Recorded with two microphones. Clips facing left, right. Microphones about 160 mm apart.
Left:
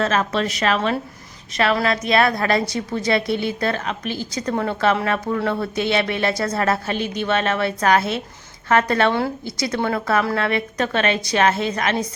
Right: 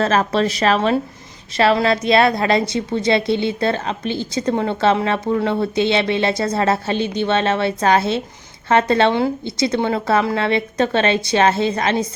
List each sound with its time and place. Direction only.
0.0 s a woman's voice: 35° right (ahead or behind)